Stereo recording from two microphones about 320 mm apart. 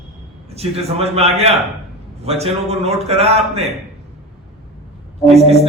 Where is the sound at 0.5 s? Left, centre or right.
Centre.